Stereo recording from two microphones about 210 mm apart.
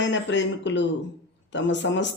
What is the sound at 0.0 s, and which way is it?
Speech, 60° left (ahead or behind).